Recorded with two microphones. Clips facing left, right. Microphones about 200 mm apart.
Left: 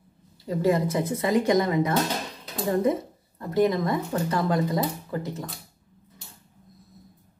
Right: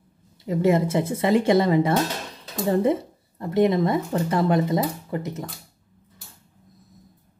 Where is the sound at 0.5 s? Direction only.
25° right (ahead or behind).